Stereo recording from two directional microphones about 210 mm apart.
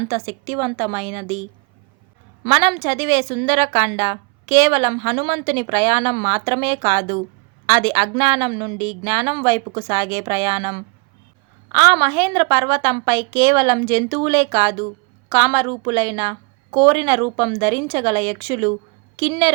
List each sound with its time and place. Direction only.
0.1 s a woman's voice: 15° right (ahead or behind)
2.4 s a woman's voice: 25° right (ahead or behind)